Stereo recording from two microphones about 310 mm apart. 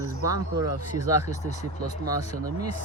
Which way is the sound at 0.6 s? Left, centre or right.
Right.